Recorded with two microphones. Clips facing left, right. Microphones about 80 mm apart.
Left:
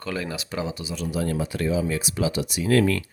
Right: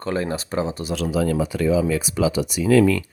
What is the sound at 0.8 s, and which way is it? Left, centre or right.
Speech, right.